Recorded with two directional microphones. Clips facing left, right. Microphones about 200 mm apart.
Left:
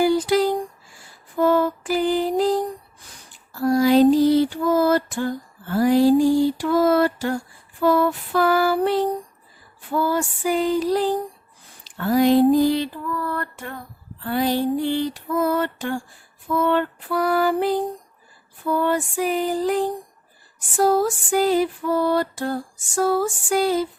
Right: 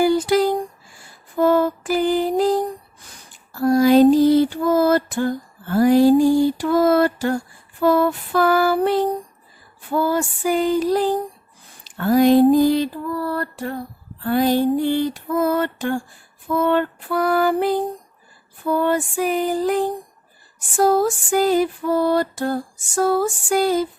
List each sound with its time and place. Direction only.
0.0 s a sound: 50° right (ahead or behind)
1.4 s mantra: 45° right (ahead or behind)
3.6 s music: 50° right (ahead or behind)
5.7 s a sound: 50° right (ahead or behind)
7.8 s music: 45° right (ahead or behind)
9.9 s a sound: 45° right (ahead or behind)
13.1 s female singing: 35° right (ahead or behind)
14.3 s female singing: 50° right (ahead or behind)
16.6 s lullaby: 50° right (ahead or behind)
18.9 s music: 50° right (ahead or behind)
20.7 s a sound: 45° right (ahead or behind)
23.0 s music: 45° right (ahead or behind)